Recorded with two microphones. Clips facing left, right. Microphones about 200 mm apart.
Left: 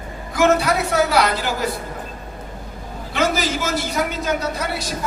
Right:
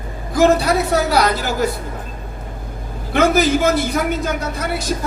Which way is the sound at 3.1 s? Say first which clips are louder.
Right 6 dB; 55° right (ahead or behind).